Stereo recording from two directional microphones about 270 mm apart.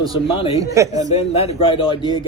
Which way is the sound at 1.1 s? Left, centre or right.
Left.